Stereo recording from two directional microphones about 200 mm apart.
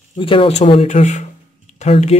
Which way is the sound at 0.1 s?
25° left (ahead or behind).